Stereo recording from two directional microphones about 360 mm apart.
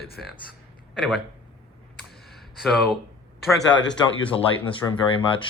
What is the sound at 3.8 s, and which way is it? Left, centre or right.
Speech, left.